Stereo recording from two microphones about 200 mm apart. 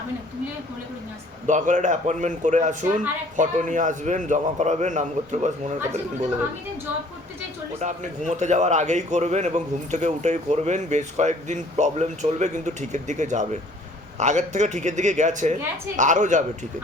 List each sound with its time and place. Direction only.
1.5 s a man's voice: 40° right (ahead or behind)
7.8 s a man's voice: 35° right (ahead or behind)